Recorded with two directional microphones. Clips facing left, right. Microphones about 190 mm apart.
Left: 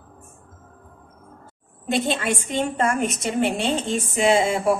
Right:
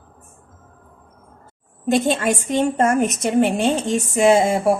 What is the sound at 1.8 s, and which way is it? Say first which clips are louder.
A woman's voice: right 5 dB; 45° right (ahead or behind).